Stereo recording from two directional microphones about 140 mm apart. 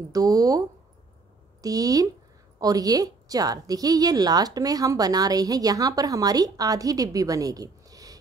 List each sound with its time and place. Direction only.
0.1 s a woman's voice: 25° right (ahead or behind)